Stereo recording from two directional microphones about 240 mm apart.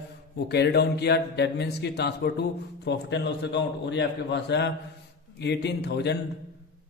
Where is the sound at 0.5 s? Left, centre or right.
Left.